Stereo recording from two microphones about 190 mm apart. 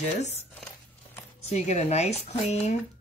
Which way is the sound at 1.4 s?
35° left (ahead or behind).